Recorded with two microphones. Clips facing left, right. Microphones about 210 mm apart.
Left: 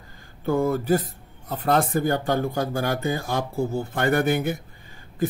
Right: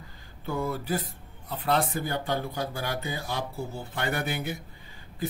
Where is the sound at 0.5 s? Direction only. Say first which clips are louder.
Left 9 dB; 45° left (ahead or behind).